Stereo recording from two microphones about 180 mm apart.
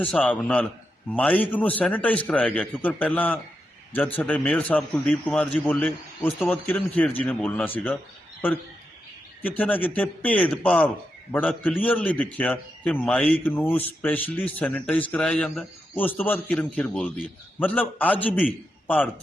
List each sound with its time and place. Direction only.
0.0 s a man's voice: 5° left (ahead or behind)
9.4 s a man's voice: 10° left (ahead or behind)